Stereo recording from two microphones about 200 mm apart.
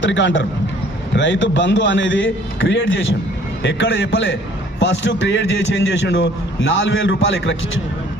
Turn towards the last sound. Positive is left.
turn(degrees=70)  # may be behind; listen again after turning